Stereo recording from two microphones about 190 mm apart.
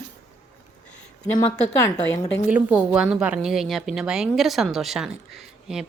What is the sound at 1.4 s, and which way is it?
Speech, 15° left (ahead or behind).